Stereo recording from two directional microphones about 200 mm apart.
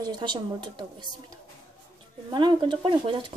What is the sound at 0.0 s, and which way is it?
Speech, 20° right (ahead or behind).